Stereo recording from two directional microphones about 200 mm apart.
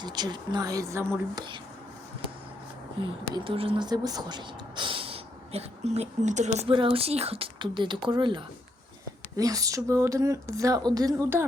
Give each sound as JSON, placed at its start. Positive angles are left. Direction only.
{"t": 0.0, "sound": "speech", "side_deg": -20}
{"t": 3.3, "sound": "speech", "side_deg": -25}